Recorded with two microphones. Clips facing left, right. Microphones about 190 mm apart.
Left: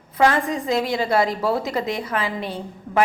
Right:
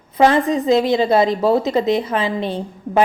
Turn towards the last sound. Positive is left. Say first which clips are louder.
# right 4 dB
turn(degrees=-25)  # may be behind; listen again after turning